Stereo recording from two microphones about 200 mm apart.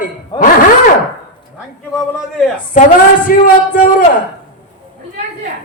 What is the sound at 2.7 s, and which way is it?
Speech, 40° left (ahead or behind).